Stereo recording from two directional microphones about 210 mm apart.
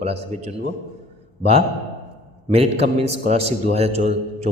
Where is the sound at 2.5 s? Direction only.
30° right (ahead or behind).